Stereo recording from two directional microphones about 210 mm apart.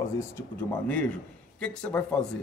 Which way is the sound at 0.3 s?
10° left (ahead or behind).